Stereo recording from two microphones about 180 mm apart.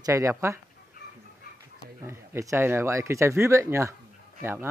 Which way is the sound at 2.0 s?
15° right (ahead or behind).